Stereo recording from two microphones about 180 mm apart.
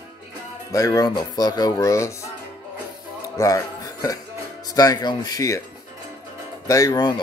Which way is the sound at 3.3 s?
15° left (ahead or behind).